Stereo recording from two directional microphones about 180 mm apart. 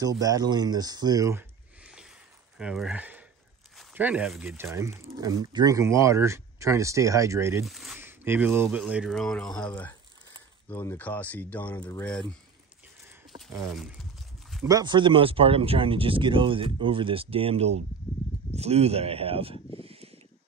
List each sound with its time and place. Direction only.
0.0 s speech: 20° right (ahead or behind)
1.8 s a sound: 5° right (ahead or behind)
3.7 s speech: 5° right (ahead or behind)
4.7 s speech: 15° right (ahead or behind)
7.6 s speech: centre (ahead or behind)
8.0 s speech: 10° right (ahead or behind); by 12.3 s 5° left (ahead or behind)
13.7 s speech: centre (ahead or behind)
14.7 s speech: 25° right (ahead or behind)
19.8 s a sound: 35° right (ahead or behind)